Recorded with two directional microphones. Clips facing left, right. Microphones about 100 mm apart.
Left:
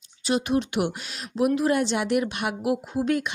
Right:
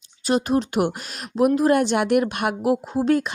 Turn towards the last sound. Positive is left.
turn(degrees=-35)  # may be behind; listen again after turning